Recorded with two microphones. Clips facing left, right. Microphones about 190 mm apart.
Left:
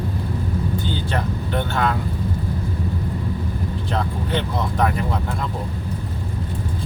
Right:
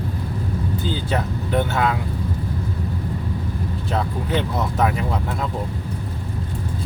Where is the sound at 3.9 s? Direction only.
5° right (ahead or behind).